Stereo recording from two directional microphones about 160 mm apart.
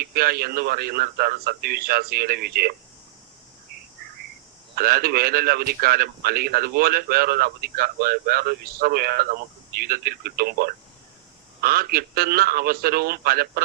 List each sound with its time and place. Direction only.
0.0 s a man's voice: 70° right (ahead or behind)
4.7 s a man's voice: 70° right (ahead or behind)